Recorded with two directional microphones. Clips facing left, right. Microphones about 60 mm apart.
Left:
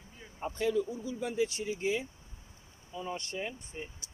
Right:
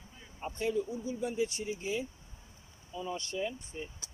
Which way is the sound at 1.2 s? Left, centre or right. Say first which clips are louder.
Left 2 dB; left.